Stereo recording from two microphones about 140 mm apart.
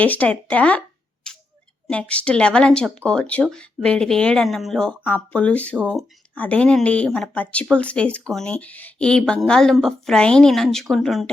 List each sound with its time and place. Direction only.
0.0 s speech: 10° left (ahead or behind)
1.9 s speech: 10° left (ahead or behind)